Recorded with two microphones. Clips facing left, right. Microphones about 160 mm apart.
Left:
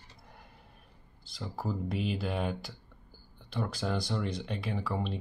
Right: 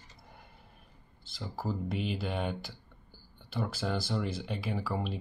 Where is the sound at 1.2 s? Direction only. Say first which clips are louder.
Even; centre (ahead or behind).